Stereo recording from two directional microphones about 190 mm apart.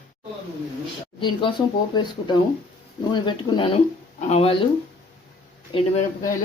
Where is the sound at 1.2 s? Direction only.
25° left (ahead or behind).